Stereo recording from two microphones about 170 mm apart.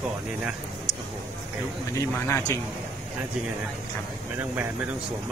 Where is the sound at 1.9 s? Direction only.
20° left (ahead or behind).